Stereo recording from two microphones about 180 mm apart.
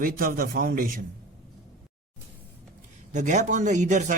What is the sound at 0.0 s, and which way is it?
Speech, 50° right (ahead or behind).